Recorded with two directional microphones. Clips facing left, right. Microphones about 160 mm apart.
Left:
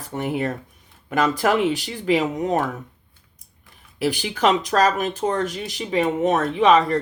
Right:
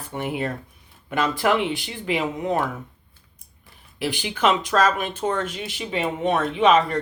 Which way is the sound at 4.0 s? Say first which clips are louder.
Left 2 dB; 40° left (ahead or behind).